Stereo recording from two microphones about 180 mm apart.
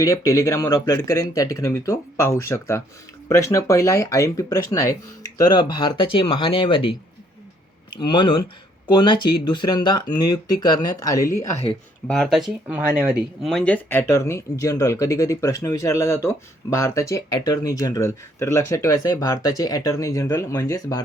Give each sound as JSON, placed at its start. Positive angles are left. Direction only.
{"t": 0.0, "sound": "speech", "side_deg": 15}
{"t": 7.9, "sound": "speech", "side_deg": 25}
{"t": 12.0, "sound": "speech", "side_deg": 5}